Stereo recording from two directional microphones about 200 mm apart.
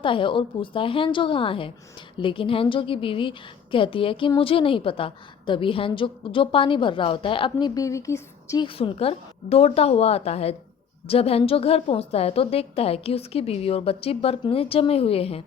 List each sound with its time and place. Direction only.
0.0 s a woman's voice: 25° left (ahead or behind)
8.6 s a woman's voice: 30° left (ahead or behind)